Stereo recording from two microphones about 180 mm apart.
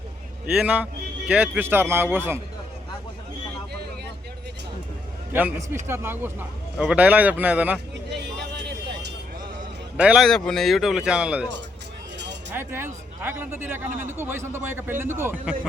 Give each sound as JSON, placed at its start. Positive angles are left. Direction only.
{"t": 0.5, "sound": "a man's voice", "side_deg": -10}
{"t": 5.3, "sound": "a man's voice", "side_deg": -10}
{"t": 8.1, "sound": "a sound", "side_deg": -70}
{"t": 10.0, "sound": "speech", "side_deg": -5}
{"t": 12.5, "sound": "a man's voice", "side_deg": -10}